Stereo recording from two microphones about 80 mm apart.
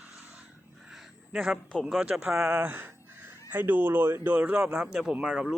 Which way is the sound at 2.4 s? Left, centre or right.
Right.